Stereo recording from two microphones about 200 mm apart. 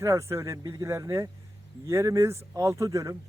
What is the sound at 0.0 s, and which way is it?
Speech, 15° right (ahead or behind).